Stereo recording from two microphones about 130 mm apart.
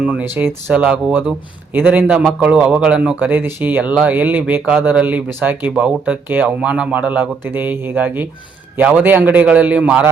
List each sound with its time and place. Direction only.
0.0 s speech: 10° right (ahead or behind)